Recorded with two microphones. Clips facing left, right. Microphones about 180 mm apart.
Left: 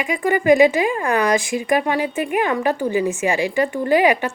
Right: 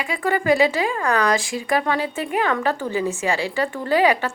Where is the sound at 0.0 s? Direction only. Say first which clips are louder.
Left 3 dB; 15° left (ahead or behind).